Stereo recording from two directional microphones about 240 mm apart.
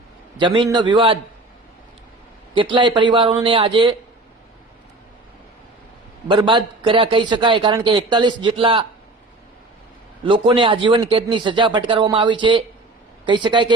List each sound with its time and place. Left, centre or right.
0.3 s a man's voice: centre
2.6 s a man's voice: centre
6.2 s a man's voice: right
10.2 s a man's voice: right